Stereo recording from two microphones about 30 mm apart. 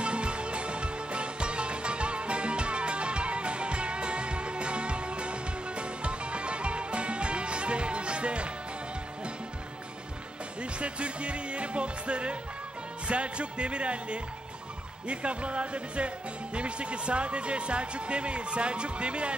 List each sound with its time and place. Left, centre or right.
0.0 s music: right
10.6 s speech: right